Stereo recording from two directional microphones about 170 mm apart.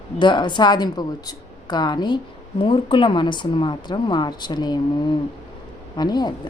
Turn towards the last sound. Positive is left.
turn(degrees=25)  # may be behind; listen again after turning